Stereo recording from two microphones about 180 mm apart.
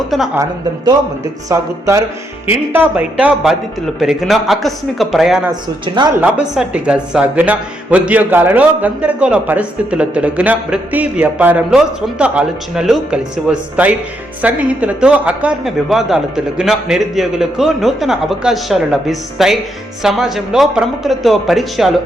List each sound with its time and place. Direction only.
0.1 s a man's voice: centre (ahead or behind)
0.9 s a man's voice: 15° right (ahead or behind); by 5.4 s centre (ahead or behind)
5.8 s a woman's voice: 25° right (ahead or behind)
6.1 s a man's voice: 5° right (ahead or behind)